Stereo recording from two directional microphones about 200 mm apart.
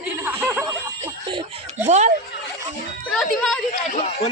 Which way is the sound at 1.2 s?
25° right (ahead or behind).